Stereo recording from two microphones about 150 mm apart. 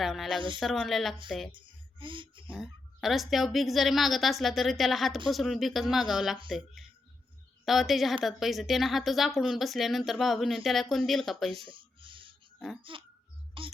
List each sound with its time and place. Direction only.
0.0 s speech: centre (ahead or behind)
0.3 s speech: 35° right (ahead or behind)
0.6 s speech: centre (ahead or behind)
1.5 s a sound: 35° right (ahead or behind)
2.5 s speech: centre (ahead or behind)
6.8 s a sound: centre (ahead or behind)
7.6 s speech: centre (ahead or behind)
11.7 s a sound: 35° right (ahead or behind)
12.5 s speech: centre (ahead or behind)
12.8 s speech: 35° right (ahead or behind)